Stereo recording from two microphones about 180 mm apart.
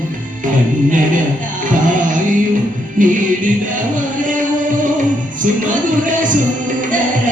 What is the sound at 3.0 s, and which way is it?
Music, 45° right (ahead or behind).